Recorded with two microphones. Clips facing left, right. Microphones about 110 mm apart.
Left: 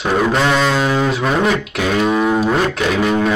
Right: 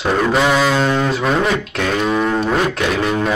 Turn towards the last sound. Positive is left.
turn(degrees=0)  # may be behind; listen again after turning